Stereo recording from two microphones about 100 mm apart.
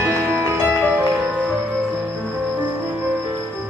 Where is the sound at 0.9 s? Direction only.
5° right (ahead or behind).